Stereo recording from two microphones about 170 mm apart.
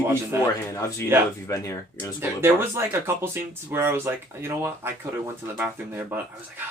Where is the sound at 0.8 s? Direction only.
20° left (ahead or behind).